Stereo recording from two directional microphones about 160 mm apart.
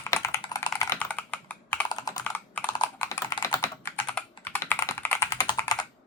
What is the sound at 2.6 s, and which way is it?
Computer keyboard, 25° left (ahead or behind).